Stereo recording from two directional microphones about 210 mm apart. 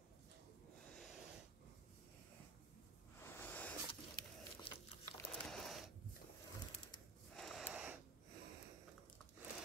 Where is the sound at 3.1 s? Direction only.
10° left (ahead or behind).